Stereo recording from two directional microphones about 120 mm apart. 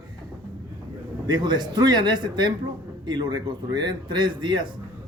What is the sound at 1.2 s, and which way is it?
A man's voice, 35° right (ahead or behind).